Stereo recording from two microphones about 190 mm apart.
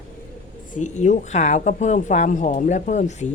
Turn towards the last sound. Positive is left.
turn(degrees=35)  # may be behind; listen again after turning